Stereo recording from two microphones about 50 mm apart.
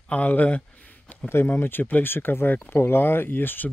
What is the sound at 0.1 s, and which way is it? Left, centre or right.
Speech, left.